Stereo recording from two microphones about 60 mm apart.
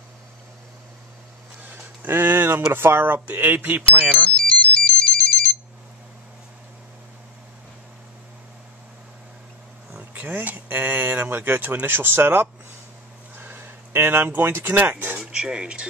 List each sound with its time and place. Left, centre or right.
2.0 s speech: right
4.1 s ringtone: centre
9.9 s speech: right
15.1 s speech: centre